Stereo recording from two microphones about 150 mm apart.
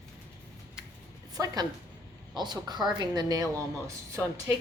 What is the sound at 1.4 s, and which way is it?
A woman's voice, 20° right (ahead or behind).